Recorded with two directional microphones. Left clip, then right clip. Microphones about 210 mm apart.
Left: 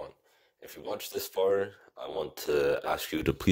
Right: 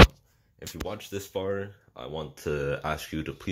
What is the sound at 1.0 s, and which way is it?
Speech, 45° left (ahead or behind).